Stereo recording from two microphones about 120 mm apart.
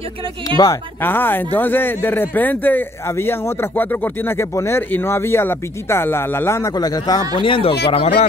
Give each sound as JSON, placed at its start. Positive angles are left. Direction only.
{"t": 0.6, "sound": "speech", "side_deg": 35}
{"t": 1.0, "sound": "speech", "side_deg": 15}
{"t": 7.4, "sound": "speech", "side_deg": 50}